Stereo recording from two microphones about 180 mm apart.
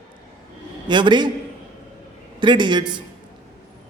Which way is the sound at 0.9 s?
25° right (ahead or behind).